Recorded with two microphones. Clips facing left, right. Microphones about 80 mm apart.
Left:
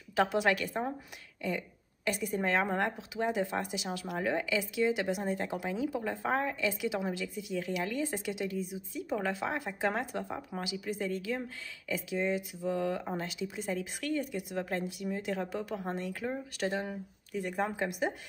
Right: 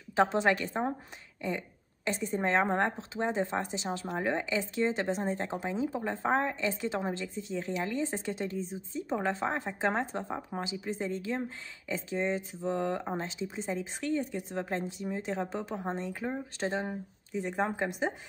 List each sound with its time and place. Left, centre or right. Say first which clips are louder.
0.1 s speech: right 2 dB; right
2.0 s speech: right 1 dB; right